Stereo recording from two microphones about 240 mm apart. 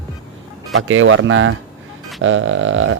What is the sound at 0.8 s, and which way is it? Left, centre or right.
A man's voice, right.